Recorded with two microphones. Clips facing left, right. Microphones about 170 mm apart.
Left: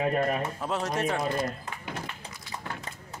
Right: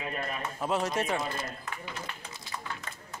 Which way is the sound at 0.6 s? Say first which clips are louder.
Even; 5° right (ahead or behind).